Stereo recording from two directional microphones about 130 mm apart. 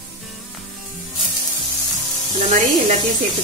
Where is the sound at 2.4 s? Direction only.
65° right (ahead or behind).